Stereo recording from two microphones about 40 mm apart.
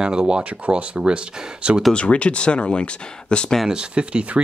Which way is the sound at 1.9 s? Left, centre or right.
Left.